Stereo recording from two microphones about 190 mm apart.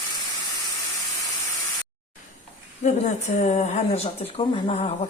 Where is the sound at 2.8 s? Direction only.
35° left (ahead or behind).